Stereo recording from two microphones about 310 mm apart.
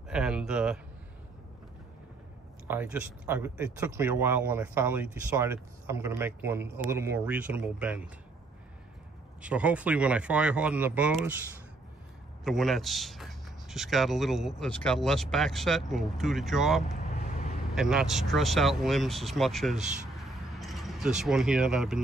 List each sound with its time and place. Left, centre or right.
0.1 s a sound: centre
2.7 s speech: centre
9.4 s speech: centre
12.4 s speech: centre
17.1 s vehicle: left
17.7 s speech: centre
20.5 s a sound: centre
21.2 s speech: centre